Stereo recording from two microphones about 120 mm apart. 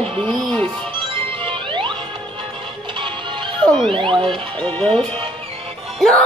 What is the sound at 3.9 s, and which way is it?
Speech, 45° right (ahead or behind).